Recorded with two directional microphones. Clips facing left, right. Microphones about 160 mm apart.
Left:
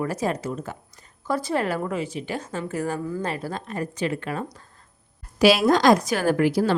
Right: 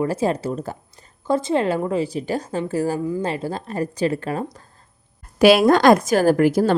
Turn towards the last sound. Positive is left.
turn(degrees=-45)  # may be behind; listen again after turning